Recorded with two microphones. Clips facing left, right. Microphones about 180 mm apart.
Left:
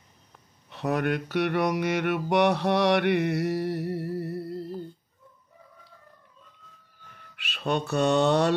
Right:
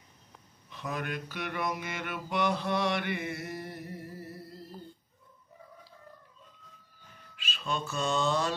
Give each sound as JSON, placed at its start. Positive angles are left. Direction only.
{"t": 0.7, "sound": "mantra", "side_deg": 65}
{"t": 7.3, "sound": "speech", "side_deg": 65}